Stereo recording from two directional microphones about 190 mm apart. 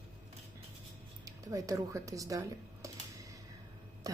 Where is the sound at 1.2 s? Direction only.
15° right (ahead or behind).